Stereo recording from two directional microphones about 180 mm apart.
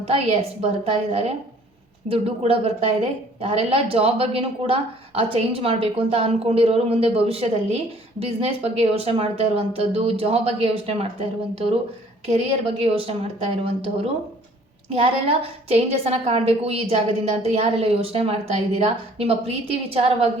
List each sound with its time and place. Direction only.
0.0 s a woman's voice: 35° right (ahead or behind)
15.7 s a woman's voice: 35° right (ahead or behind)